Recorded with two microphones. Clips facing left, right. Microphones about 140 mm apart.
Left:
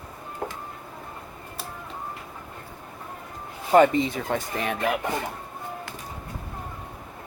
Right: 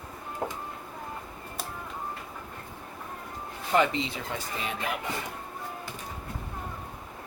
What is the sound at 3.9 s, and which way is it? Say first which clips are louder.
Speech: left 8 dB; 50° left (ahead or behind).